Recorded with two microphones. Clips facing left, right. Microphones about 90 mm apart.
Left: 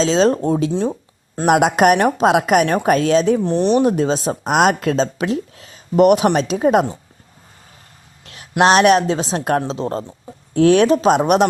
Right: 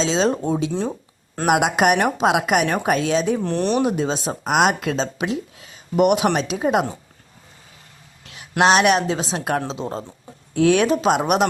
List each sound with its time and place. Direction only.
0.0 s speech: 45° left (ahead or behind)
0.7 s speech: 20° left (ahead or behind)
1.5 s speech: 40° left (ahead or behind)
8.6 s speech: 40° left (ahead or behind)
9.8 s speech: 55° left (ahead or behind)
10.5 s speech: 35° left (ahead or behind)